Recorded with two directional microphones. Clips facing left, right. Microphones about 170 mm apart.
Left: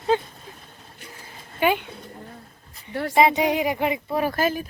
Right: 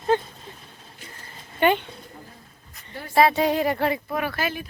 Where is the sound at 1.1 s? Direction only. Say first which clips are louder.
Left 1 dB; 5° left (ahead or behind).